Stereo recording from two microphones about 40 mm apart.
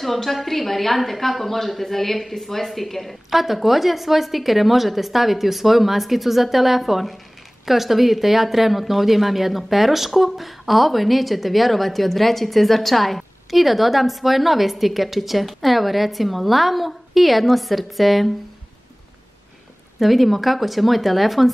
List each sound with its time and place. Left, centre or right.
0.0 s a woman's voice: centre
20.0 s a woman's voice: centre